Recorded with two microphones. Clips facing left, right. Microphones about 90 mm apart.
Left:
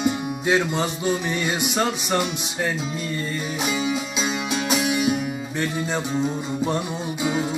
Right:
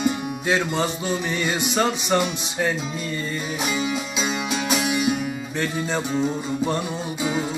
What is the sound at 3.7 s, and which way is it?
Music, 20° left (ahead or behind).